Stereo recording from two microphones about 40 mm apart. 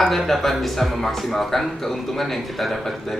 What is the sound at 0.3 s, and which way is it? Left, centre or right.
Speech, centre.